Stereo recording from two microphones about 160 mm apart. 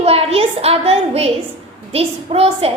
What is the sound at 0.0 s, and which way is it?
A woman's voice, 40° right (ahead or behind).